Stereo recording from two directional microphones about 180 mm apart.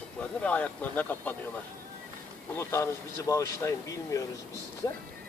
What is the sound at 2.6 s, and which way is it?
Speech, 15° left (ahead or behind).